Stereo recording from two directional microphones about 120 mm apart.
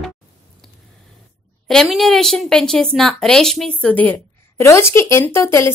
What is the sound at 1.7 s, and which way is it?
A woman's voice, centre (ahead or behind).